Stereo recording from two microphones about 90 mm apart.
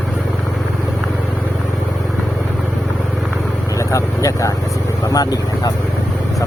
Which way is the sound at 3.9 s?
35° left (ahead or behind).